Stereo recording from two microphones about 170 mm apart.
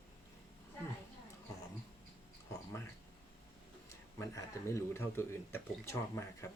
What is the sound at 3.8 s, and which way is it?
Speech, 15° left (ahead or behind).